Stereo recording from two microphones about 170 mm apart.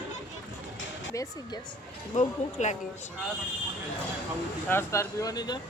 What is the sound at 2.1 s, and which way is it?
Speech, 45° left (ahead or behind).